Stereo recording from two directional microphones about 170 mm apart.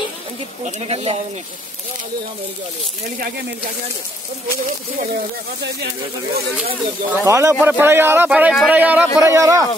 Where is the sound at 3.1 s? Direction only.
60° right (ahead or behind).